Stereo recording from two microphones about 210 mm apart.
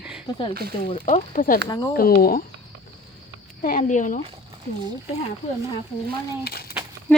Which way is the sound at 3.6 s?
40° left (ahead or behind).